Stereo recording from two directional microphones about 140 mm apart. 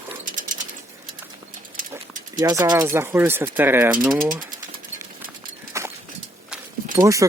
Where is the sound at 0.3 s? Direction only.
65° right (ahead or behind).